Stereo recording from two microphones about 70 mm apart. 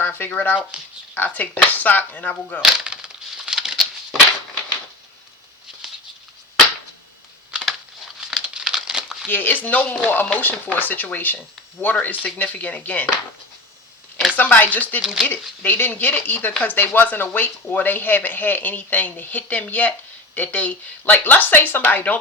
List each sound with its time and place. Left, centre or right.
0.0 s speech: left
0.7 s speech: centre
1.1 s speech: left
2.6 s a sound: centre
8.2 s crumpling: centre
9.2 s speech: left
14.3 s speech: left